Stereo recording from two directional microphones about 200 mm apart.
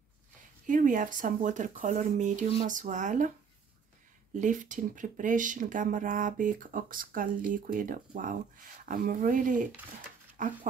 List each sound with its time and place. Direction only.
0.7 s speech: 40° right (ahead or behind)
4.4 s speech: 40° right (ahead or behind)